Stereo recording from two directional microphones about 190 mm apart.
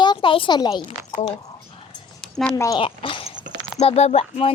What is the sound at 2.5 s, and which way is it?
Speech, 20° left (ahead or behind).